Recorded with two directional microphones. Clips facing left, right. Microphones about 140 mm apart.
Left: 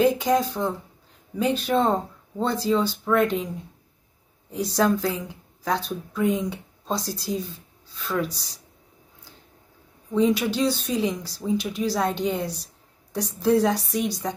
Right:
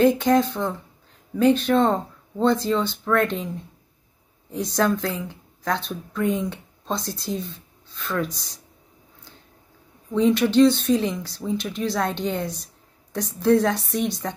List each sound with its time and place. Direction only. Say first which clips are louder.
0.0 s speech: right 3 dB; 5° left (ahead or behind)
4.7 s speech: even; 10° left (ahead or behind)
10.1 s speech: right 4 dB; 10° left (ahead or behind)